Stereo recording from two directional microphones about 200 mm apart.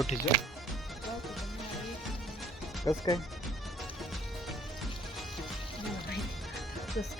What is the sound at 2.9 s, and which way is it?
Speech, 15° left (ahead or behind).